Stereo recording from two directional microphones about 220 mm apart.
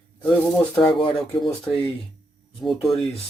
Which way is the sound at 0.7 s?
20° left (ahead or behind).